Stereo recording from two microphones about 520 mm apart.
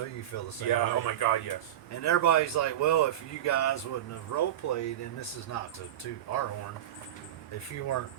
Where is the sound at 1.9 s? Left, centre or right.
Left.